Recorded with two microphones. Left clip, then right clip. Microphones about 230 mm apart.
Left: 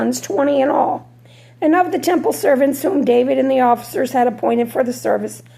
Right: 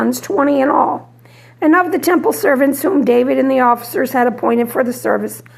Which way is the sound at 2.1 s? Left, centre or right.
Right.